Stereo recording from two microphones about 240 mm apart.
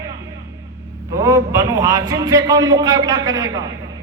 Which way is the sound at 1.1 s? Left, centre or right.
Centre.